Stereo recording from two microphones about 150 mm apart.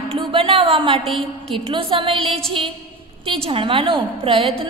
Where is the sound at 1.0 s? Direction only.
Centre (ahead or behind).